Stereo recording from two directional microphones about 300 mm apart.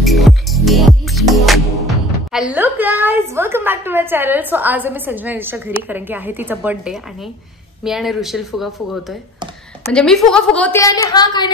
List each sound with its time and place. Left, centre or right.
0.0 s music: centre
5.9 s a woman's voice: centre